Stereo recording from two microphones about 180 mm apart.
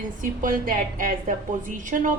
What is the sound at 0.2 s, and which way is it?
A woman's voice, 50° right (ahead or behind).